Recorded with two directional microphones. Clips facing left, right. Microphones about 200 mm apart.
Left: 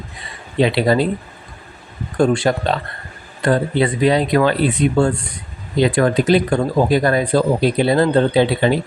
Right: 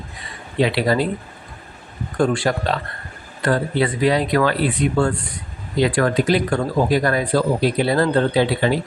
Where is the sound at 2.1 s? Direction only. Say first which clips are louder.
Left 3 dB; 25° left (ahead or behind).